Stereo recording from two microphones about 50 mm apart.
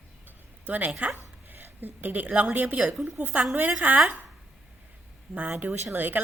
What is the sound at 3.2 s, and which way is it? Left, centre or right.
A woman's voice, right.